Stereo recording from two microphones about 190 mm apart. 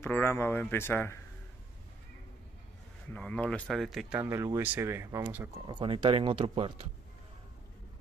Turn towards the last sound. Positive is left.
turn(degrees=-30)  # may be behind; listen again after turning